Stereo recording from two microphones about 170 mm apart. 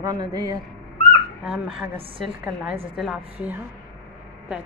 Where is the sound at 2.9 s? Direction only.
Centre (ahead or behind).